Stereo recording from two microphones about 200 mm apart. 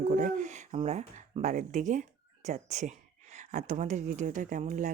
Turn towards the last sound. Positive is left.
turn(degrees=-40)  # may be behind; listen again after turning